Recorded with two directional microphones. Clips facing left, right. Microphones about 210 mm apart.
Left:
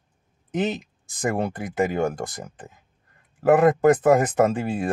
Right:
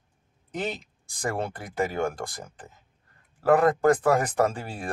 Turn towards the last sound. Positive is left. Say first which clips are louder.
# left 6 dB
turn(degrees=20)  # may be behind; listen again after turning